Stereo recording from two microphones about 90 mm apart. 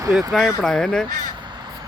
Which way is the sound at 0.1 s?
Centre (ahead or behind).